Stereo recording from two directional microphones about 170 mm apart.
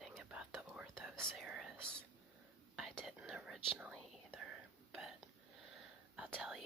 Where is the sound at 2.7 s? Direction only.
Centre (ahead or behind).